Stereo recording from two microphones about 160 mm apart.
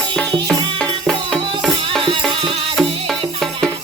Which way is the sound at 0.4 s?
5° left (ahead or behind).